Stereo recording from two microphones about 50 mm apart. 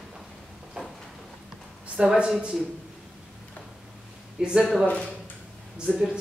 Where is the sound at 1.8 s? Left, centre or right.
Right.